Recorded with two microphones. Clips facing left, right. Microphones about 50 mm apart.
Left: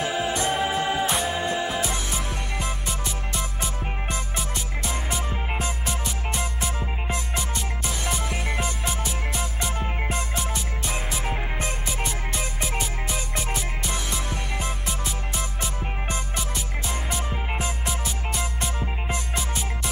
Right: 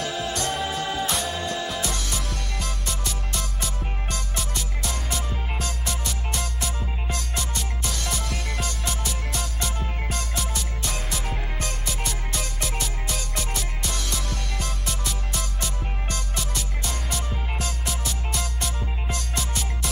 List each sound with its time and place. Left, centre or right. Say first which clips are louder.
0.0 s music: left 3 dB; centre